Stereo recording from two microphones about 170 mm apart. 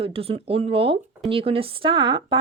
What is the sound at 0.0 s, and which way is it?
Speech, 35° right (ahead or behind).